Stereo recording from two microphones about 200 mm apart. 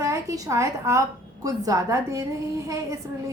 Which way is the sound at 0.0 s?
15° right (ahead or behind).